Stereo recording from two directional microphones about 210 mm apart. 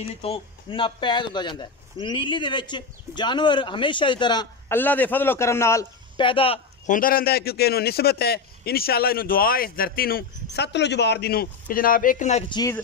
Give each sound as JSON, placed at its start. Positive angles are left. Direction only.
{"t": 0.0, "sound": "a man's voice", "side_deg": 30}
{"t": 6.9, "sound": "a man's voice", "side_deg": 45}
{"t": 12.5, "sound": "speech", "side_deg": 15}